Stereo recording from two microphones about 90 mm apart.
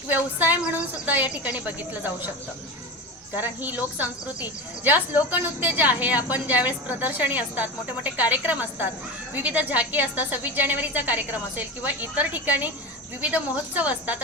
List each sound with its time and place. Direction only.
0.1 s a woman's voice: 20° right (ahead or behind)
3.3 s a woman's voice: 20° right (ahead or behind)